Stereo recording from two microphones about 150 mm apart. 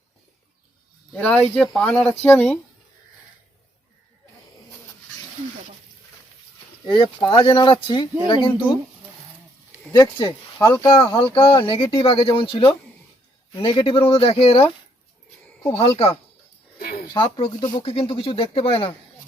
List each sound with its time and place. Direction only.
1.1 s speech: 10° left (ahead or behind)
6.8 s speech: 30° left (ahead or behind)
9.9 s speech: 30° left (ahead or behind)
15.7 s speech: 40° left (ahead or behind)
17.2 s speech: 35° left (ahead or behind)